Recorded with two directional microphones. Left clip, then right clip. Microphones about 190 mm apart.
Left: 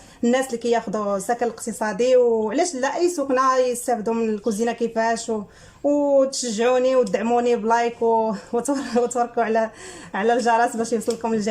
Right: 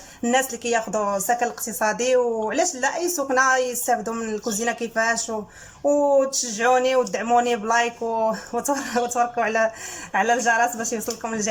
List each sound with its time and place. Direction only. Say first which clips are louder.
0.2 s speech: left 1 dB; 20° left (ahead or behind)